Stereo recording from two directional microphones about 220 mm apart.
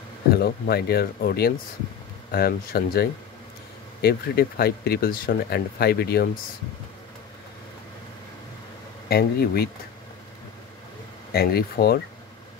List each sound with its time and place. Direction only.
0.3 s speech: 45° left (ahead or behind)
9.1 s speech: 45° left (ahead or behind)
11.3 s speech: 45° left (ahead or behind)